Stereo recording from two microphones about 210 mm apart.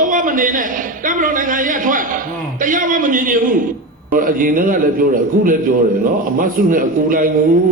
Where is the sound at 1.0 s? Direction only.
40° right (ahead or behind).